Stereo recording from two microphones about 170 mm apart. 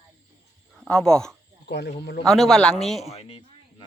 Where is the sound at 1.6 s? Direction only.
75° left (ahead or behind).